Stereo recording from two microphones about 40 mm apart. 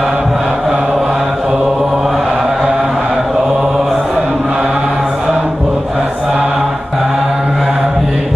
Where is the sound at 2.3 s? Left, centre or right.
Centre.